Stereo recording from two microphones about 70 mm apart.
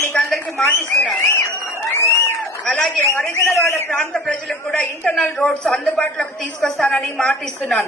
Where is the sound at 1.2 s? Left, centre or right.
Left.